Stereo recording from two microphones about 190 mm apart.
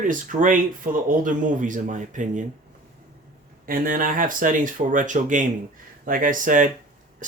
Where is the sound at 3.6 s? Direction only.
50° right (ahead or behind).